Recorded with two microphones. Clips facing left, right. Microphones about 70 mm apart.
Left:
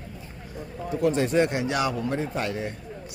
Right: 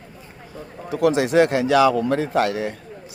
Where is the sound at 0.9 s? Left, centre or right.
Right.